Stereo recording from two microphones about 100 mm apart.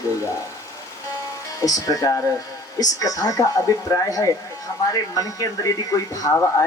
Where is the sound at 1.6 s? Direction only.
35° left (ahead or behind).